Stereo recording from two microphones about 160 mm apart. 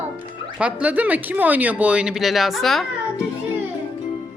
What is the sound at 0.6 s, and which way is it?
Speech, 10° right (ahead or behind).